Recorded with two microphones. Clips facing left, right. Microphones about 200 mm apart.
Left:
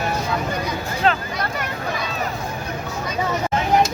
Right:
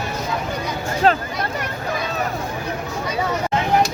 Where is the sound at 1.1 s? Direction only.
40° right (ahead or behind).